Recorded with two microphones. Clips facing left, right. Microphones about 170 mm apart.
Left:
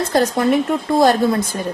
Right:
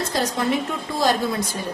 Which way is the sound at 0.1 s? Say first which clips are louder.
Left 8 dB; 55° left (ahead or behind).